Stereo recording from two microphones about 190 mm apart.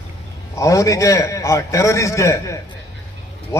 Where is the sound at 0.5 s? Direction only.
15° left (ahead or behind).